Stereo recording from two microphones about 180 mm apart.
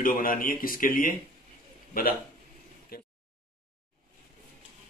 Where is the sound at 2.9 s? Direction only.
55° left (ahead or behind).